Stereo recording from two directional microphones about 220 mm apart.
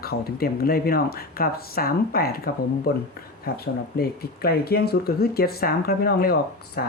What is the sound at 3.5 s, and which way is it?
Speech, 45° left (ahead or behind).